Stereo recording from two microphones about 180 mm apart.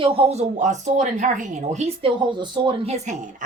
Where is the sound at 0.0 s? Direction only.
35° right (ahead or behind).